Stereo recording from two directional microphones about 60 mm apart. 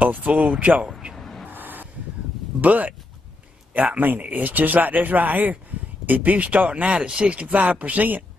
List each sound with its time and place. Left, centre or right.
0.0 s speech: right
1.1 s vehicle: centre
1.5 s a sound: right
2.6 s speech: right